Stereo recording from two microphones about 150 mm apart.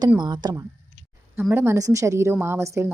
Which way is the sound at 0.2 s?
30° right (ahead or behind).